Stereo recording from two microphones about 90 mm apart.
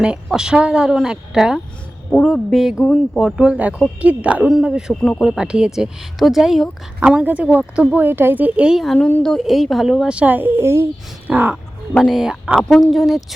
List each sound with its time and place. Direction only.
0.3 s a woman's voice: 10° right (ahead or behind)
2.0 s a woman's voice: 5° left (ahead or behind); by 8.8 s 10° right (ahead or behind)
9.0 s speech: 20° left (ahead or behind)
9.2 s speech: centre (ahead or behind); by 11.6 s 20° right (ahead or behind)
11.9 s speech: centre (ahead or behind)